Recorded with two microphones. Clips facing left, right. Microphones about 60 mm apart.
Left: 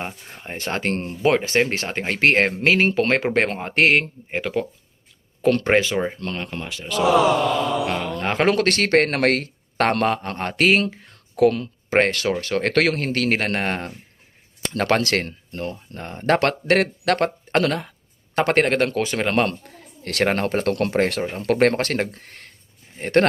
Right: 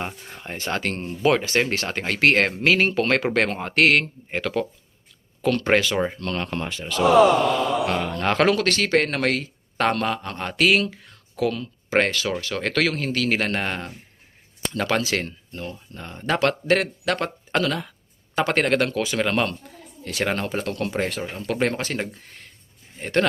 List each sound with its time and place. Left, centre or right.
0.0 s a man's voice: centre
0.5 s a man's voice: left; by 4.7 s centre
5.4 s speech: left
5.6 s a man's voice: left
6.5 s speech: centre
8.2 s a man's voice: centre
8.4 s speech: left
20.2 s speech: left